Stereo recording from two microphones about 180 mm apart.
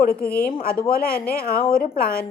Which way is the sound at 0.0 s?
55° left (ahead or behind).